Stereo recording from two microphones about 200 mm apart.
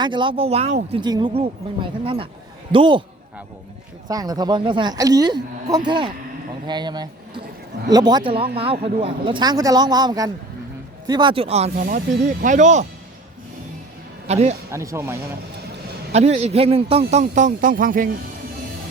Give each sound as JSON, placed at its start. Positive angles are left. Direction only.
{"t": 0.0, "sound": "speech", "side_deg": -25}
{"t": 4.1, "sound": "speech", "side_deg": -20}
{"t": 11.8, "sound": "speech", "side_deg": -45}
{"t": 14.3, "sound": "speech", "side_deg": -30}
{"t": 14.7, "sound": "speech", "side_deg": -15}
{"t": 16.1, "sound": "speech", "side_deg": -30}